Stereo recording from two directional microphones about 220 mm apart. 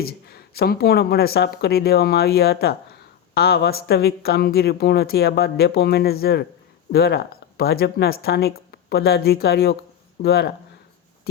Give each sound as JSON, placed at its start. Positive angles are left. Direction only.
{"t": 0.0, "sound": "speech", "side_deg": 45}